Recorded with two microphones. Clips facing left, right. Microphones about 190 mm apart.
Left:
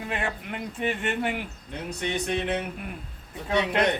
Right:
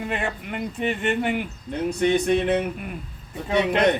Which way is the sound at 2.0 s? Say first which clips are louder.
Right 8 dB; 50° right (ahead or behind).